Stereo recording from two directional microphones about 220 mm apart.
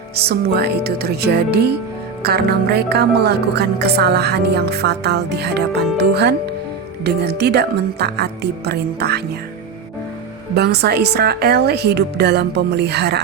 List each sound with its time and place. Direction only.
0.2 s speech: 45° right (ahead or behind)
10.5 s speech: 50° right (ahead or behind)